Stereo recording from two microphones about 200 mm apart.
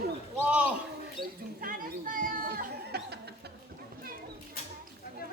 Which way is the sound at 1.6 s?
45° right (ahead or behind).